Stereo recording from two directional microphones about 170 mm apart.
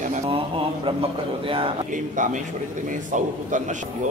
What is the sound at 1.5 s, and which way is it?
Speech, 30° right (ahead or behind).